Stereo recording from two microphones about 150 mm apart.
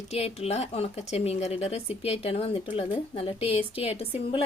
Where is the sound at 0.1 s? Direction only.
45° left (ahead or behind).